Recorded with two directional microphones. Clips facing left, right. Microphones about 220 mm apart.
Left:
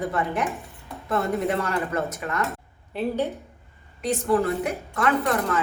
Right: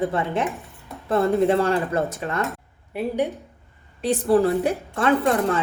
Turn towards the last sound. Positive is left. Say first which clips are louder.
# right 3 dB
turn(degrees=-30)  # may be behind; listen again after turning